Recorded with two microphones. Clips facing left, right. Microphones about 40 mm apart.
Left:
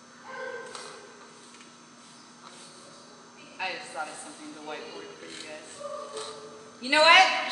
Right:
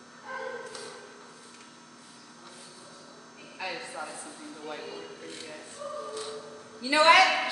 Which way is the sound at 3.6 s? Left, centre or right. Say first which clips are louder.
Left 3 dB; left.